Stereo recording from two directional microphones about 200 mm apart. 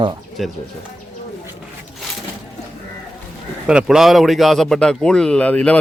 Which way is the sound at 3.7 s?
5° right (ahead or behind).